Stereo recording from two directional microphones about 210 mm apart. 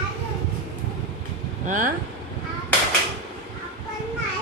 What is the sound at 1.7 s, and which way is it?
Speech, 40° right (ahead or behind).